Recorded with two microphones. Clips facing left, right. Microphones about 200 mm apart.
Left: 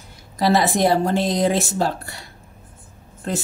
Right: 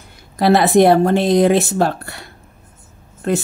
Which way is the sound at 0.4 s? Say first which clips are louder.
Right 6 dB; 60° right (ahead or behind).